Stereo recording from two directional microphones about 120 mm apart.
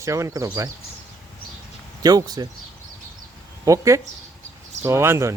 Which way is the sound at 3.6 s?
25° right (ahead or behind).